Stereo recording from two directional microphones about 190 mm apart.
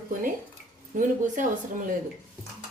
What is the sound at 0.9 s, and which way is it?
Speech, 40° right (ahead or behind).